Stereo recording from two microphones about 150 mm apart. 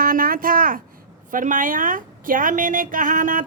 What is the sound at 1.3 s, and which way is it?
A woman's voice, 60° right (ahead or behind).